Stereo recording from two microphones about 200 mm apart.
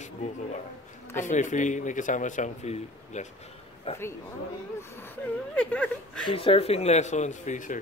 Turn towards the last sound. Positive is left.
turn(degrees=40)  # may be behind; listen again after turning